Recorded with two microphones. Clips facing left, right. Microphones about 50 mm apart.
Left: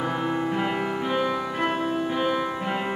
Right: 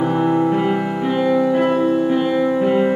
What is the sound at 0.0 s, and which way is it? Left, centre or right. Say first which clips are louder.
Music: right 9 dB; centre.